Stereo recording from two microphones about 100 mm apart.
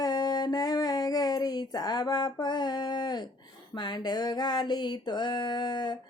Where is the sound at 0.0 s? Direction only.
40° left (ahead or behind).